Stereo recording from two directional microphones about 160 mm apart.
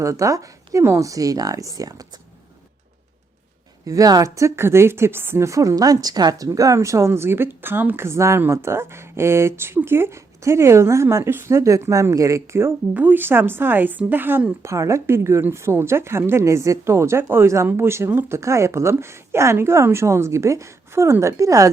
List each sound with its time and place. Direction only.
0.0 s speech: 20° right (ahead or behind)
3.8 s a woman's voice: 20° right (ahead or behind)